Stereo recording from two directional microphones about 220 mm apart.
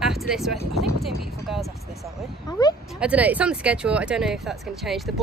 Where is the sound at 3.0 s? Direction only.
5° right (ahead or behind).